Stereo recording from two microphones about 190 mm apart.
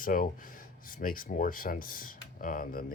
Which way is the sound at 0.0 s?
45° left (ahead or behind).